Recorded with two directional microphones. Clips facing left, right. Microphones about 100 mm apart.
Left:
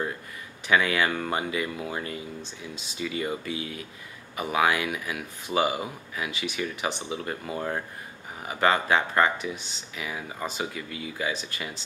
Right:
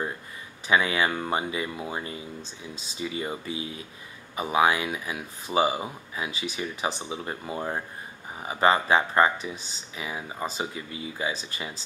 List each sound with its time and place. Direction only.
0.7 s speech: 20° right (ahead or behind)